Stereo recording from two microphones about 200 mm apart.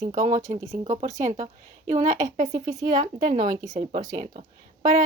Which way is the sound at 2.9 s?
40° right (ahead or behind).